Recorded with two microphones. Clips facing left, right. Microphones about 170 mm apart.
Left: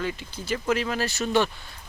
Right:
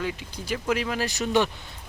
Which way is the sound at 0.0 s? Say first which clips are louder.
Even; 10° right (ahead or behind).